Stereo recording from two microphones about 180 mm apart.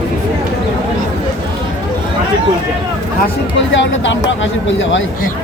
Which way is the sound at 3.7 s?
90° left.